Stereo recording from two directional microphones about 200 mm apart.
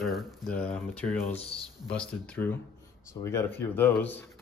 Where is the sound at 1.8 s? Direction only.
5° left (ahead or behind).